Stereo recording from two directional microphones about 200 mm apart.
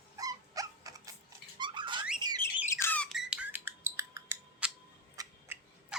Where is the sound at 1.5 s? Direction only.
25° right (ahead or behind).